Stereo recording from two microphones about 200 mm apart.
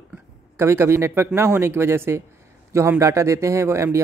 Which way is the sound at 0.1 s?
10° right (ahead or behind).